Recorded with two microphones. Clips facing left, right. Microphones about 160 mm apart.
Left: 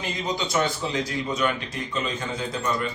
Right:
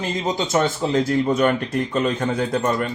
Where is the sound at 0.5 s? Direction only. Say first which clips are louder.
Right 7 dB; 45° right (ahead or behind).